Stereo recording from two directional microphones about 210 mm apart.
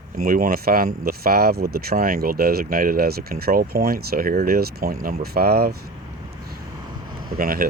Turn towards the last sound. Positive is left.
turn(degrees=-45)  # may be behind; listen again after turning